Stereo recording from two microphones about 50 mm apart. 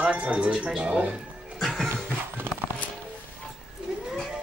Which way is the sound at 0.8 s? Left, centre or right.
Right.